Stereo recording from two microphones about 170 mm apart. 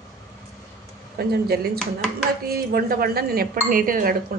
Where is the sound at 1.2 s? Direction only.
65° right (ahead or behind).